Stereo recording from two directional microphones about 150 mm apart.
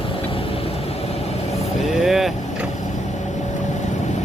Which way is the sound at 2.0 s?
Centre (ahead or behind).